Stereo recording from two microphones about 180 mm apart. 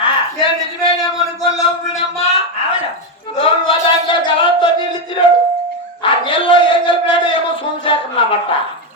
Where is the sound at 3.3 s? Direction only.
30° left (ahead or behind).